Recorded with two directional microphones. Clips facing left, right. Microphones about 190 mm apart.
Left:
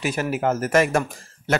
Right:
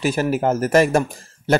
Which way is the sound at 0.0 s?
35° right (ahead or behind).